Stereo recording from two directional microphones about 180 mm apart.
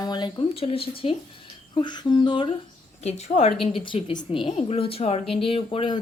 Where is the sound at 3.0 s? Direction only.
35° left (ahead or behind).